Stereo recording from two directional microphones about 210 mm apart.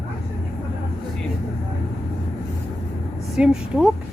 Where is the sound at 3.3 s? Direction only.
5° right (ahead or behind).